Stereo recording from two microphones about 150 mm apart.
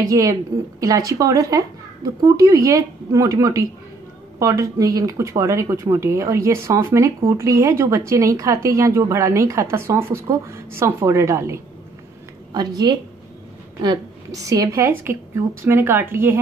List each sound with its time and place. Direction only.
0.0 s a woman's voice: 25° right (ahead or behind)